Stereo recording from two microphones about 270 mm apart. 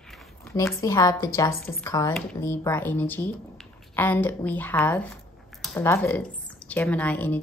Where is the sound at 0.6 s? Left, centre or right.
Centre.